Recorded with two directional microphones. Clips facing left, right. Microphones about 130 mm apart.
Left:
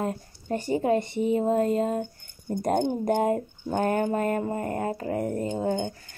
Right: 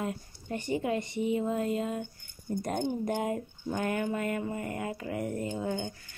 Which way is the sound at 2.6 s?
55° left (ahead or behind).